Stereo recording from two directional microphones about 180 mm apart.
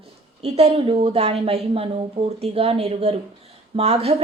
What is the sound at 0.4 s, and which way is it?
A woman's voice, 35° right (ahead or behind).